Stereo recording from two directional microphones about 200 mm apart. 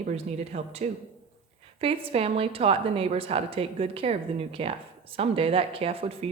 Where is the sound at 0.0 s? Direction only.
35° right (ahead or behind).